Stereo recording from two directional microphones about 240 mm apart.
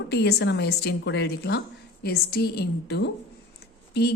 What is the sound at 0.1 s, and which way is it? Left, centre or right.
A woman's voice, left.